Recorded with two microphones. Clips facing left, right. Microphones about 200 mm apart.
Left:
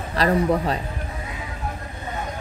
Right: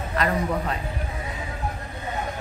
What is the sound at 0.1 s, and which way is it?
Speech, 35° left (ahead or behind).